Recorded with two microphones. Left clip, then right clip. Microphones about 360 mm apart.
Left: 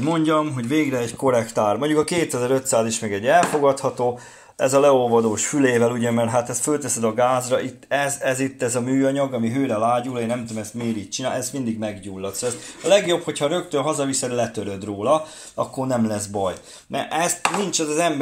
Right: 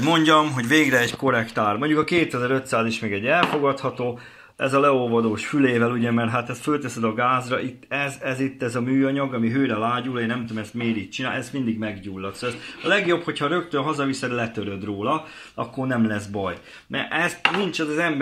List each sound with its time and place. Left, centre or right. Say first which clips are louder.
0.0 s a man's voice: right 3 dB; centre
16.9 s a man's voice: left 1 dB; centre